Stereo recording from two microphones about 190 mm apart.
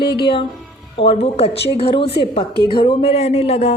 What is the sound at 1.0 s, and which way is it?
A woman's voice, 30° left (ahead or behind).